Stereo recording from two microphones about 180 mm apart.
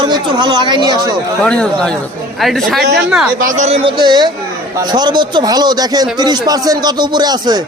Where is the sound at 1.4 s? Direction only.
5° left (ahead or behind).